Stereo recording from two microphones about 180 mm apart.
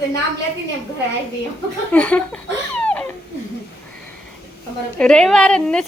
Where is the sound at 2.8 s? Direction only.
5° left (ahead or behind).